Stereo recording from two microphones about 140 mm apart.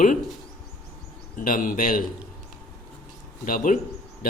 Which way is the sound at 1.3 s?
75° left (ahead or behind).